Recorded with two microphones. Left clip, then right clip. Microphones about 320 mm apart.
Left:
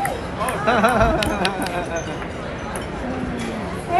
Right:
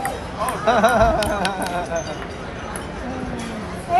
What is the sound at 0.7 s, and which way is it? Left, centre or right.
Music, right.